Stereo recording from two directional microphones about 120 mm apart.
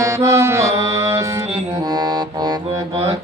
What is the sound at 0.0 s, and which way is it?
Music, 25° right (ahead or behind).